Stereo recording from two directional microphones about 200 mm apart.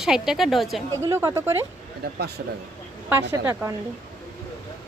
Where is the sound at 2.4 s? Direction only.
55° right (ahead or behind).